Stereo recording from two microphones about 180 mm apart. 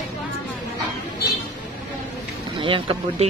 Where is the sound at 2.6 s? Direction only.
30° right (ahead or behind).